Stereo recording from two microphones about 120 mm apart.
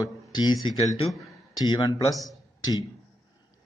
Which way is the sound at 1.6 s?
40° left (ahead or behind).